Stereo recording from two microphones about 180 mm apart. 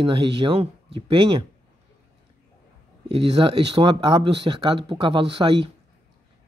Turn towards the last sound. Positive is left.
turn(degrees=-30)  # may be behind; listen again after turning